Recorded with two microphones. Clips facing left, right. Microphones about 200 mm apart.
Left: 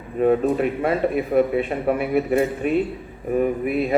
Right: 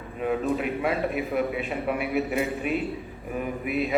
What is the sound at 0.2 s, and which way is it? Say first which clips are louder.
A man's voice: left 8 dB; 45° left (ahead or behind).